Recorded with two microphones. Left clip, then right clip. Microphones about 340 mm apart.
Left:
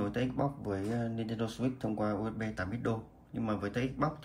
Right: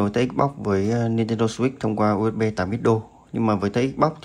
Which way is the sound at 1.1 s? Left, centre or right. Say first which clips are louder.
Right 14 dB; centre.